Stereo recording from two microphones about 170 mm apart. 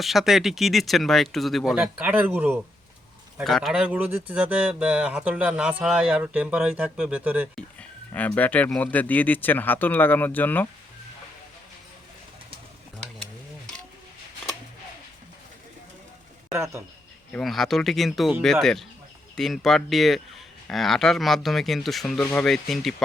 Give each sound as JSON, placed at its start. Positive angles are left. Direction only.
{"t": 0.0, "sound": "speech", "side_deg": 0}
{"t": 3.3, "sound": "speech", "side_deg": 0}
{"t": 7.5, "sound": "speech", "side_deg": 10}
{"t": 16.5, "sound": "speech", "side_deg": -15}
{"t": 17.3, "sound": "speech", "side_deg": 0}